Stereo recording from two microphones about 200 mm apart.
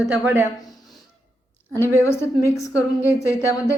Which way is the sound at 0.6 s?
20° left (ahead or behind).